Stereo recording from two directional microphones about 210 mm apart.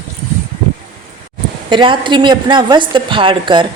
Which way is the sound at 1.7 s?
25° right (ahead or behind).